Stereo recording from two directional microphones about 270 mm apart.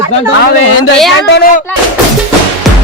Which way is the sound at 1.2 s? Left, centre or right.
Left.